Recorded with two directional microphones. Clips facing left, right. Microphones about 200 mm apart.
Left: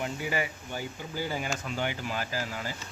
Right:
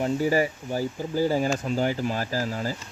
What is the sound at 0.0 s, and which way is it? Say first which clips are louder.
Speech: right 9 dB; 35° right (ahead or behind).